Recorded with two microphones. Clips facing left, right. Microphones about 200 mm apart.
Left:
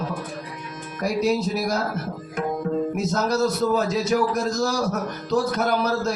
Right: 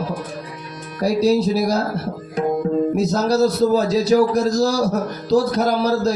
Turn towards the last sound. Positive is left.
turn(degrees=-35)  # may be behind; listen again after turning